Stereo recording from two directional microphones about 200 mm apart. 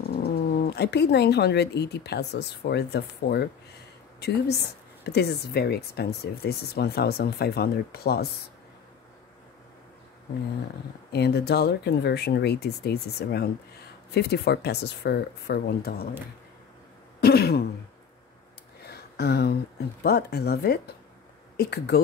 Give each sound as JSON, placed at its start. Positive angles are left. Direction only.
{"t": 0.2, "sound": "speech", "side_deg": 55}
{"t": 5.0, "sound": "speech", "side_deg": 55}
{"t": 11.1, "sound": "speech", "side_deg": 55}
{"t": 17.2, "sound": "throat clearing", "side_deg": 50}
{"t": 18.9, "sound": "a sound", "side_deg": 55}
{"t": 20.0, "sound": "speech", "side_deg": 50}